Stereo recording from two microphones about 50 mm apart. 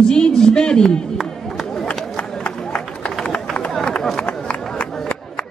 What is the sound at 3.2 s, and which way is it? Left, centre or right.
Run, left.